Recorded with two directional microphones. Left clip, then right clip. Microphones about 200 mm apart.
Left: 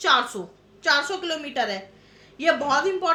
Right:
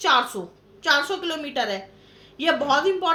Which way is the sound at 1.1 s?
5° right (ahead or behind).